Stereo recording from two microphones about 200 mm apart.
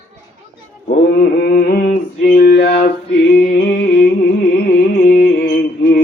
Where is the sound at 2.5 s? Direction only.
55° left (ahead or behind).